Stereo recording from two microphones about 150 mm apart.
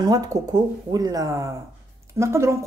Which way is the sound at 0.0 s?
25° right (ahead or behind).